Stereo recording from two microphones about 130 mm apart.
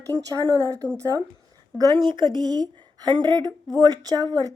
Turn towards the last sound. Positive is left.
turn(degrees=-30)  # may be behind; listen again after turning